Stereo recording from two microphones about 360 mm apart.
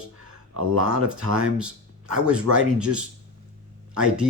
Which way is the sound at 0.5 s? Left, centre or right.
Right.